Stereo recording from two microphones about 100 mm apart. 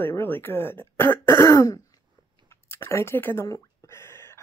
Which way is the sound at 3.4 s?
30° left (ahead or behind).